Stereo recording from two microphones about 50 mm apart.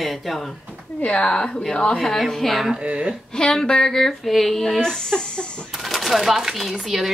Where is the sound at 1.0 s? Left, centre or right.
Left.